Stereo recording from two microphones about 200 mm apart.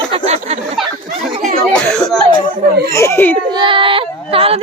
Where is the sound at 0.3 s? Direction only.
35° right (ahead or behind).